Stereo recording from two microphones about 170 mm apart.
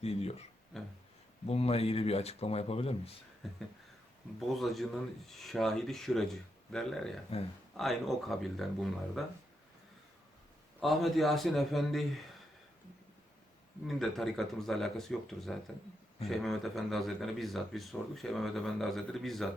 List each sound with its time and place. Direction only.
0.0 s speech: 35° left (ahead or behind)
0.7 s a sound: centre (ahead or behind)
1.5 s speech: 35° left (ahead or behind)
3.4 s a sound: centre (ahead or behind)
4.4 s speech: centre (ahead or behind)
7.3 s speech: 35° left (ahead or behind)
7.8 s speech: centre (ahead or behind)
10.8 s speech: centre (ahead or behind)
13.8 s speech: centre (ahead or behind)